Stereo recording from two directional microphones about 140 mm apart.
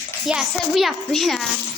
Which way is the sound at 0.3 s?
Centre (ahead or behind).